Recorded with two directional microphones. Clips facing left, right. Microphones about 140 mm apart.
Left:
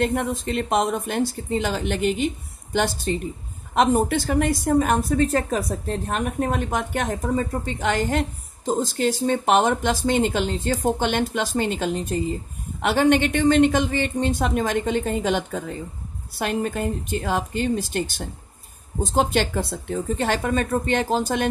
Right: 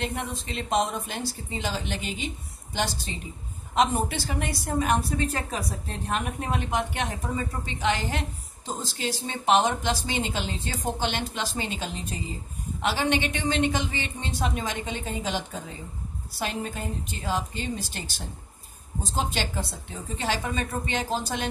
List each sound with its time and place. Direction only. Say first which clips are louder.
0.0 s a woman's voice: left 9 dB; 50° left (ahead or behind)